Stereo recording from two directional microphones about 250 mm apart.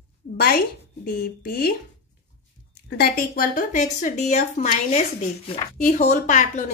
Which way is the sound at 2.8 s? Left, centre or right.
Left.